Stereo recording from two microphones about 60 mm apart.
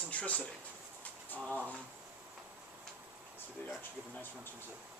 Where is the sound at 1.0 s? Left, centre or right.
Left.